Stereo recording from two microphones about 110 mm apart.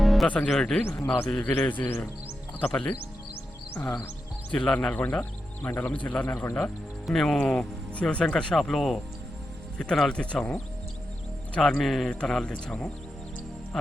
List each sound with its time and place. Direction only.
0.0 s music: centre (ahead or behind)
0.3 s a man's voice: 10° left (ahead or behind)
3.8 s music: 20° left (ahead or behind)
4.5 s a man's voice: 5° left (ahead or behind)
7.1 s a man's voice: 5° left (ahead or behind)